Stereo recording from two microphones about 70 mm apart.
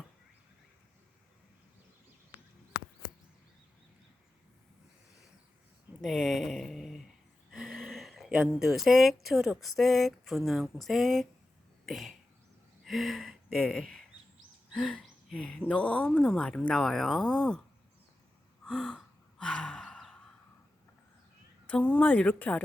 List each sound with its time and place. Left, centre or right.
6.0 s speech: centre
7.7 s a sound: centre
8.4 s speech: centre
11.9 s cough: centre
12.8 s a sound: centre
13.6 s speech: centre
14.7 s a sound: centre
15.4 s speech: centre
18.6 s gasp: centre
21.7 s speech: centre